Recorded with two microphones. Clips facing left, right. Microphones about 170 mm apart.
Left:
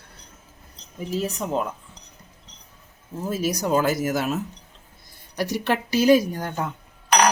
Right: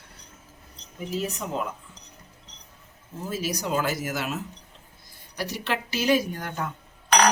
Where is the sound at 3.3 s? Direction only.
45° left (ahead or behind).